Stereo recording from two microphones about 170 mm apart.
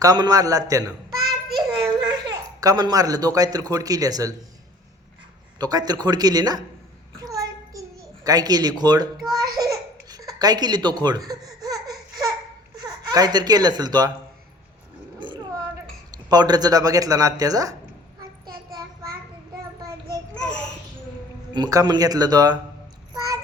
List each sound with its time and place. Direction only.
0.0 s speech: 20° right (ahead or behind)
1.5 s child singing: centre (ahead or behind)
2.0 s a man's voice: 20° right (ahead or behind)
5.5 s speech: 25° right (ahead or behind)
7.2 s a sound: 20° right (ahead or behind)
9.6 s baby laughter: 20° right (ahead or behind)
12.7 s speech: 20° right (ahead or behind)
15.2 s a sound: 30° right (ahead or behind)
16.1 s speech: 25° right (ahead or behind)
21.5 s speech: 20° right (ahead or behind)
23.1 s child singing: 20° right (ahead or behind)